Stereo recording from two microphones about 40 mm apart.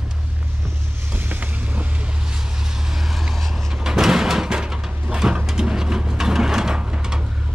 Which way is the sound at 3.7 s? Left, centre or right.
Centre.